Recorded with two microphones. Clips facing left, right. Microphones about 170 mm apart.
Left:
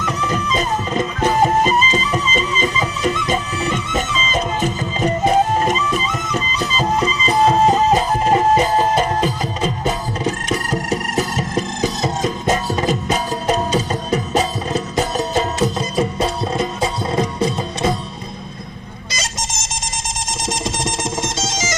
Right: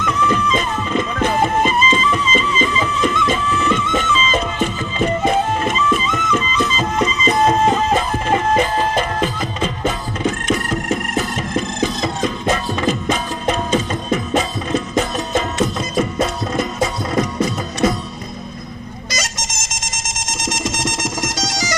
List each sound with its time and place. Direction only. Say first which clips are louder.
0.0 s music: right 3 dB; 40° left (ahead or behind)
19.1 s music: even; 30° left (ahead or behind)